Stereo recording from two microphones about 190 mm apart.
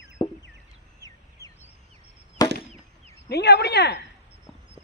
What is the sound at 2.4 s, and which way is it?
Chop, 20° left (ahead or behind).